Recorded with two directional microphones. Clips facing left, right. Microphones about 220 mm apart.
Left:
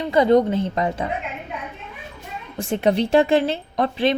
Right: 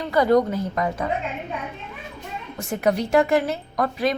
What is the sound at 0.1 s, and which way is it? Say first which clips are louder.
Speech: left 2 dB; 25° left (ahead or behind).